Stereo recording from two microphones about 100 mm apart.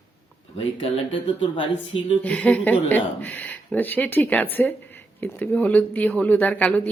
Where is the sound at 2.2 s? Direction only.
10° left (ahead or behind).